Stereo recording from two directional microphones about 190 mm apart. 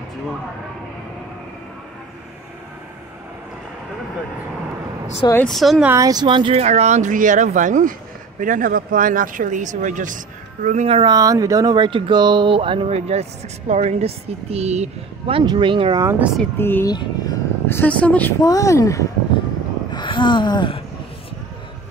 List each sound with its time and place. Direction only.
5.3 s speech: 5° left (ahead or behind)
5.9 s speech: 15° right (ahead or behind)
16.5 s a woman's voice: 10° left (ahead or behind)